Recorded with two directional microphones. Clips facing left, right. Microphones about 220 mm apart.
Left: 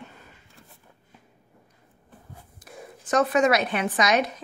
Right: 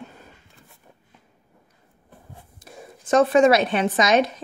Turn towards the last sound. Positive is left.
turn(degrees=-25)  # may be behind; listen again after turning